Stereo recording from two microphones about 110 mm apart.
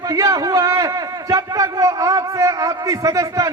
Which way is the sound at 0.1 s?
30° right (ahead or behind).